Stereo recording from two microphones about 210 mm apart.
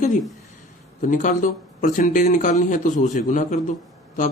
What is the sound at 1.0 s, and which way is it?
Speech, 35° left (ahead or behind).